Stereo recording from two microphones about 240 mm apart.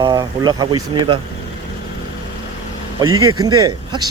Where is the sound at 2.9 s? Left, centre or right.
Centre.